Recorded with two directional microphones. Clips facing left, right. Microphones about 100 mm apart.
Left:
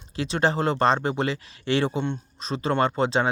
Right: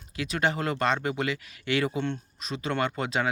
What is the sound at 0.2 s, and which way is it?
Speech, 30° left (ahead or behind).